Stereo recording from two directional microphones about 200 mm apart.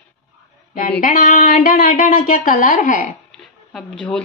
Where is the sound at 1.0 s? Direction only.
45° left (ahead or behind).